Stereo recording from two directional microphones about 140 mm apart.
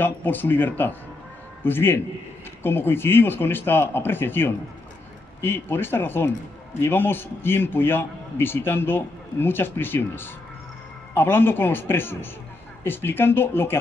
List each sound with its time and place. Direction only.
0.0 s a man's voice: 15° left (ahead or behind)